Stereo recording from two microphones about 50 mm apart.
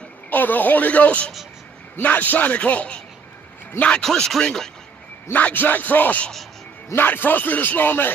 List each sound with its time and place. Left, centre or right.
0.3 s speech: left
4.0 s speech: centre
5.3 s speech: left